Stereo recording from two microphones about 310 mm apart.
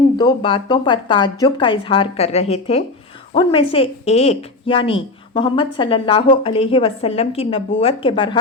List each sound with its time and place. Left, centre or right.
0.2 s speech: centre